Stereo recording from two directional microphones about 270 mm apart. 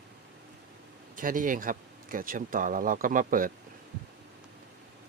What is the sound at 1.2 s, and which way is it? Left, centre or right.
Speech, right.